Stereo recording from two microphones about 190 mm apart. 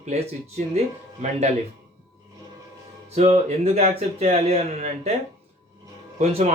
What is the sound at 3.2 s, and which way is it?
Speech, 35° right (ahead or behind).